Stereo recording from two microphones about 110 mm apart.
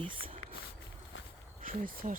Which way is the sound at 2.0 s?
90° right.